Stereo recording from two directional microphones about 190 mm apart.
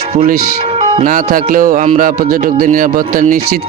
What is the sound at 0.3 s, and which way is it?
Speech, 50° right (ahead or behind).